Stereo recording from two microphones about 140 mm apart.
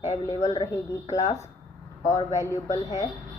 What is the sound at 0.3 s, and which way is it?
Speech, 25° left (ahead or behind).